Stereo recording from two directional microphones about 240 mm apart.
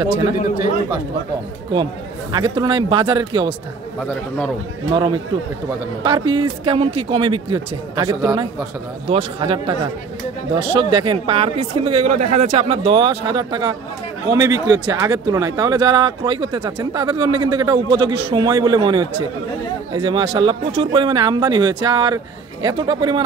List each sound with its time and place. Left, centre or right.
0.0 s speech: centre
2.3 s speech: centre
4.9 s speech: centre